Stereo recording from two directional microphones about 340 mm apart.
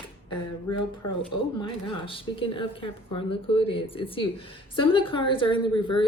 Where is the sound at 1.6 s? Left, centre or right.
Centre.